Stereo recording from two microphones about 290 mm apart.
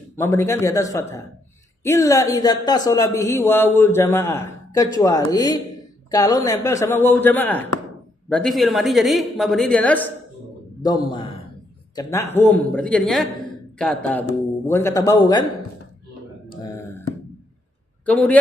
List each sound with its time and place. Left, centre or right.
0.2 s a woman's voice: centre
10.8 s a man's voice: centre
12.3 s a woman's voice: centre
16.6 s a sound: centre
18.0 s a man's voice: centre